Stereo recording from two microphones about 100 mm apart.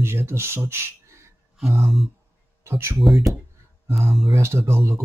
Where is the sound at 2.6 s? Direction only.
25° right (ahead or behind).